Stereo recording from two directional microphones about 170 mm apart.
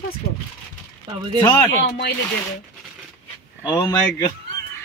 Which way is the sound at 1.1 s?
30° right (ahead or behind).